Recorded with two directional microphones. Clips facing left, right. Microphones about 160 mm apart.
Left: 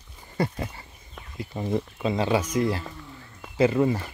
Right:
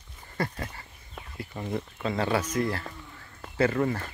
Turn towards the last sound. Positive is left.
turn(degrees=15)  # may be behind; listen again after turning